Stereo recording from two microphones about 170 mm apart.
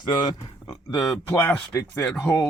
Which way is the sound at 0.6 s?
20° left (ahead or behind).